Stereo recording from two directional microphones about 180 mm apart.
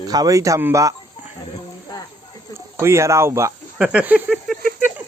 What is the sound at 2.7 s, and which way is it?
Speech, 15° right (ahead or behind).